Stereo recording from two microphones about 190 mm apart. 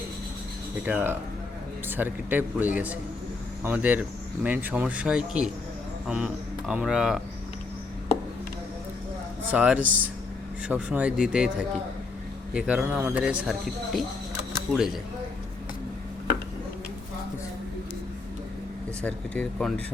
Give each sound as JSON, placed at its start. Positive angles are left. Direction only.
{"t": 0.9, "sound": "speech", "side_deg": -10}
{"t": 9.5, "sound": "speech", "side_deg": -5}
{"t": 12.5, "sound": "speech", "side_deg": -5}
{"t": 19.0, "sound": "speech", "side_deg": 5}